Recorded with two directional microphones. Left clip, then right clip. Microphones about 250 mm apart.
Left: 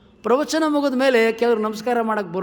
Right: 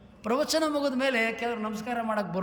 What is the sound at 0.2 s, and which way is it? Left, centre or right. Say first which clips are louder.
A man's voice: left 7 dB; centre.